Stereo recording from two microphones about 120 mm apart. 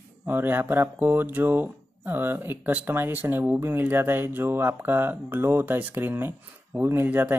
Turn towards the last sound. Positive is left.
turn(degrees=-15)  # may be behind; listen again after turning